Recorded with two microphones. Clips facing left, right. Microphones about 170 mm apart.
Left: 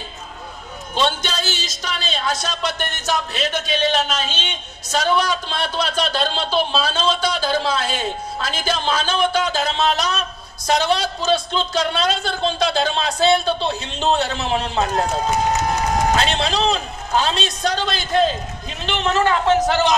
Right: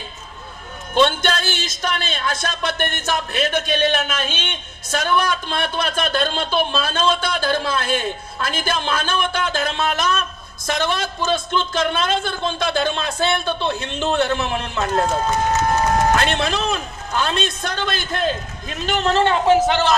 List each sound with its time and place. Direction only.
0.9 s a man's voice: 55° right (ahead or behind)
16.2 s a man's voice: 55° right (ahead or behind); by 19.4 s 30° right (ahead or behind)
19.4 s a man's voice: 10° right (ahead or behind)